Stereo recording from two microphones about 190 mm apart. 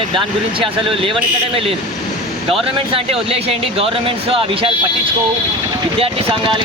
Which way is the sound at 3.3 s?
30° right (ahead or behind).